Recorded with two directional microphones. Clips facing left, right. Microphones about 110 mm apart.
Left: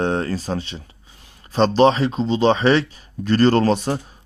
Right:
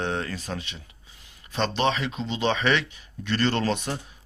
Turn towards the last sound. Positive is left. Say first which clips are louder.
# left 9 dB
turn(degrees=35)  # may be behind; listen again after turning